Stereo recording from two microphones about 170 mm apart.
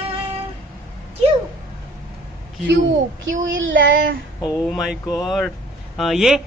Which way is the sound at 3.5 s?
90° right.